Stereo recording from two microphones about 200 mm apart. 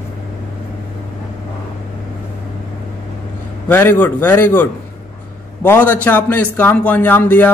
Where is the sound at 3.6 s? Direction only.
10° left (ahead or behind).